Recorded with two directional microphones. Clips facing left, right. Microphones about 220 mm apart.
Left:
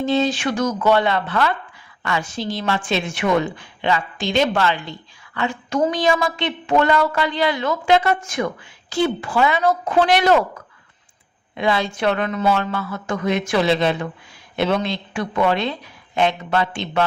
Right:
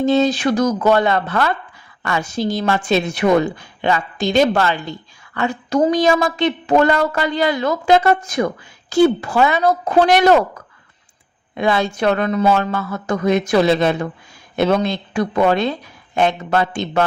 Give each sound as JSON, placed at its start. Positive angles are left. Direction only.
{"t": 0.0, "sound": "a woman's voice", "side_deg": -40}
{"t": 11.5, "sound": "a woman's voice", "side_deg": -45}